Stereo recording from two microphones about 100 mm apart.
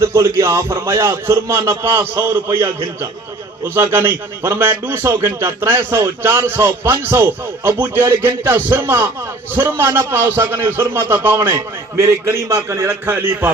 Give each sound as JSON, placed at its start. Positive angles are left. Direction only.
{"t": 0.0, "sound": "a man's voice", "side_deg": -25}